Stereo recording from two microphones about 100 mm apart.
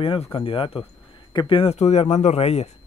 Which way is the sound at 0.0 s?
60° left (ahead or behind).